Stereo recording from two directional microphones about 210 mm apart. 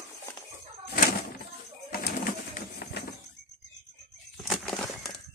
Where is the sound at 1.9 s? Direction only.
45° left (ahead or behind).